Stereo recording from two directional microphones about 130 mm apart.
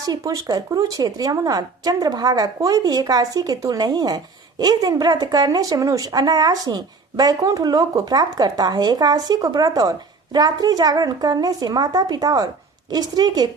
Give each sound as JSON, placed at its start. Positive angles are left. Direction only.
{"t": 0.0, "sound": "speech", "side_deg": -25}